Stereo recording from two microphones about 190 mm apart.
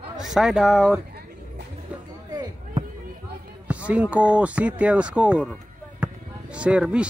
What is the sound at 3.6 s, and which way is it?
Speech, 5° right (ahead or behind).